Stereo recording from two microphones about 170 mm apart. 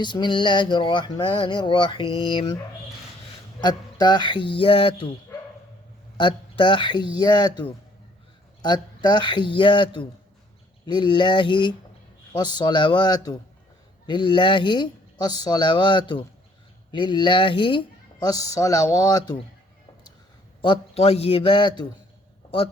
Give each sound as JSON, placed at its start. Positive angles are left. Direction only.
{"t": 0.0, "sound": "speech", "side_deg": 25}
{"t": 3.6, "sound": "speech", "side_deg": 25}
{"t": 6.1, "sound": "speech", "side_deg": 30}
{"t": 20.6, "sound": "a man's voice", "side_deg": 35}